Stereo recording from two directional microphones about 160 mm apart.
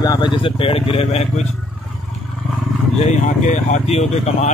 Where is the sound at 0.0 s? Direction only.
25° left (ahead or behind).